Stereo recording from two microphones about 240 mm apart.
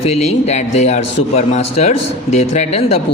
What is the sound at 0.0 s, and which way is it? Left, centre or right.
A man's voice, left.